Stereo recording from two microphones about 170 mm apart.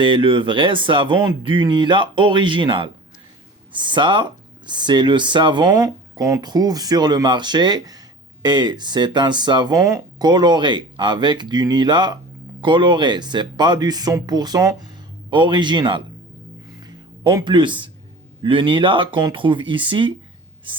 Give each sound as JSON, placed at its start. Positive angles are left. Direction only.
{"t": 0.0, "sound": "speech", "side_deg": -30}
{"t": 17.3, "sound": "speech", "side_deg": -25}